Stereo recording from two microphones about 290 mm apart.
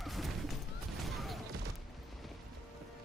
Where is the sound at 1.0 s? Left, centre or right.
Centre.